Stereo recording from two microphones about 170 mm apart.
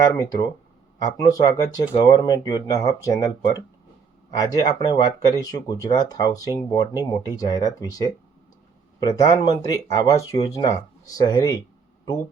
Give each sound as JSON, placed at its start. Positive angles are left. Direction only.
{"t": 0.0, "sound": "speech", "side_deg": 20}